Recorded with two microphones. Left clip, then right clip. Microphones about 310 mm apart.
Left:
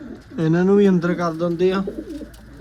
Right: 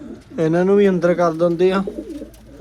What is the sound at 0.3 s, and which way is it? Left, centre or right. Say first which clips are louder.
Speech: right 2 dB; centre.